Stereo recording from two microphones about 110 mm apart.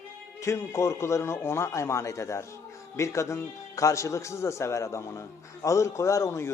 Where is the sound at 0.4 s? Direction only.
25° left (ahead or behind).